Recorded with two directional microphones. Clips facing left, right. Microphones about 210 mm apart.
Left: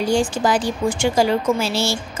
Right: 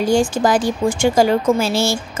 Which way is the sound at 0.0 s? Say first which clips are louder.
Right 3 dB; 45° right (ahead or behind).